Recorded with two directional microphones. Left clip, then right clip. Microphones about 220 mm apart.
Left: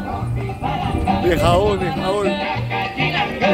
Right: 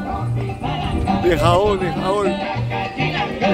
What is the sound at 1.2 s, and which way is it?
A man's voice, centre (ahead or behind).